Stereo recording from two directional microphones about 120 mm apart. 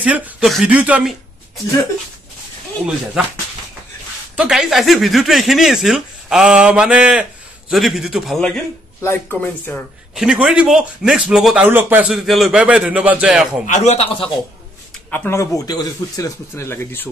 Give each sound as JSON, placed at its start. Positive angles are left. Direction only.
{"t": 0.0, "sound": "a man's voice", "side_deg": -10}
{"t": 4.4, "sound": "speech", "side_deg": -5}
{"t": 9.0, "sound": "speech", "side_deg": 15}
{"t": 10.1, "sound": "a man's voice", "side_deg": -5}
{"t": 12.1, "sound": "a man's voice", "side_deg": -5}
{"t": 13.7, "sound": "speech", "side_deg": 80}
{"t": 15.0, "sound": "speech", "side_deg": 15}